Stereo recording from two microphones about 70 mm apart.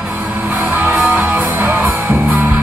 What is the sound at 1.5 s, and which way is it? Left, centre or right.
Music, right.